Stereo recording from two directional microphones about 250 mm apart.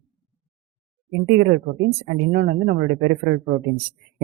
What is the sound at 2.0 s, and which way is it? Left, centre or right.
Speech, right.